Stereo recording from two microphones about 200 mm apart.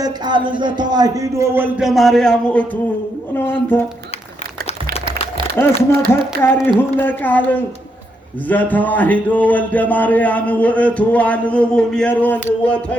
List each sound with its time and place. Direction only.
0.0 s a man's voice: 25° right (ahead or behind); by 2.6 s 5° left (ahead or behind)
5.6 s speech: 10° left (ahead or behind)